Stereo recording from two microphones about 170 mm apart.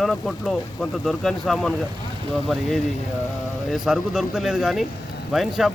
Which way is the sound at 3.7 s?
5° right (ahead or behind).